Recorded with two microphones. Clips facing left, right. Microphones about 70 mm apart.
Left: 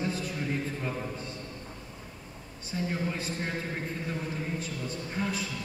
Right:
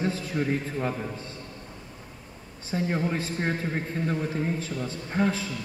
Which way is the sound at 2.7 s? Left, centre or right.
Right.